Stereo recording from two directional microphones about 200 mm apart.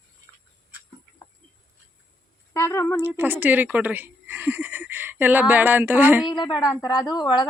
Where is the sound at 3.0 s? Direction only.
10° right (ahead or behind).